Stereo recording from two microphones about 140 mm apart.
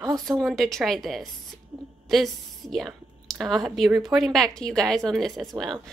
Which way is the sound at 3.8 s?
20° right (ahead or behind).